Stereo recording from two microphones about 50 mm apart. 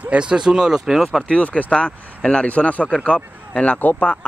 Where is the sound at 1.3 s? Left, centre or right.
Left.